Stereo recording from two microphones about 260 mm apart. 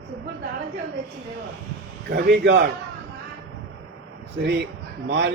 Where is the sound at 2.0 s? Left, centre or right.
Right.